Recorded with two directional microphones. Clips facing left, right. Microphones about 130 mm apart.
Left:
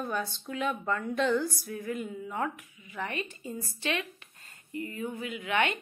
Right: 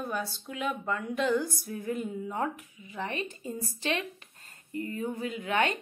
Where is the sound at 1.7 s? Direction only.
35° right (ahead or behind).